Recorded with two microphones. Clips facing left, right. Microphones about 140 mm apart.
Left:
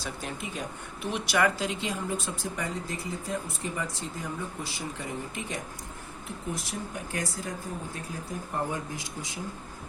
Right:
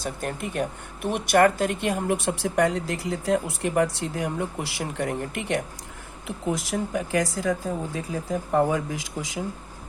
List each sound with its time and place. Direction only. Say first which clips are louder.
0.0 s speech: right 6 dB; 50° right (ahead or behind); by 5.6 s 70° right (ahead or behind)
6.2 s speech: right 8 dB; 90° right